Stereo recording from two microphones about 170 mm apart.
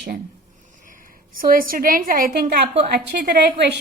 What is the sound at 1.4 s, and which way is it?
A woman's voice, 55° right (ahead or behind).